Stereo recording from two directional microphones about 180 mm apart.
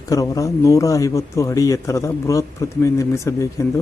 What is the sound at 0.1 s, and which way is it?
Speech, 20° left (ahead or behind).